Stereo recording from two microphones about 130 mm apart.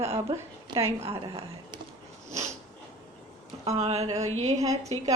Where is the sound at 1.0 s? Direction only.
45° right (ahead or behind).